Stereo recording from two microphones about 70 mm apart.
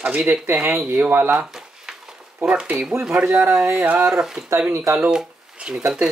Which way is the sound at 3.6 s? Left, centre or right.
Right.